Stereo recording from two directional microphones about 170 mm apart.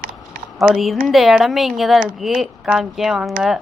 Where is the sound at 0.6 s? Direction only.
Centre (ahead or behind).